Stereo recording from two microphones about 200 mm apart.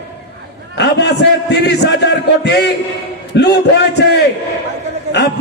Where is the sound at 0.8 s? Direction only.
55° left (ahead or behind).